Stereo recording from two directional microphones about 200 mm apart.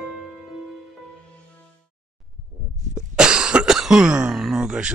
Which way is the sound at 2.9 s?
5° right (ahead or behind).